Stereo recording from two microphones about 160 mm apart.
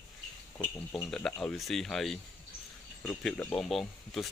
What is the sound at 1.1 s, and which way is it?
Speech, 5° left (ahead or behind).